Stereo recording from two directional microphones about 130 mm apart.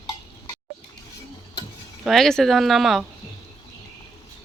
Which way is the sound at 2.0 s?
Centre (ahead or behind).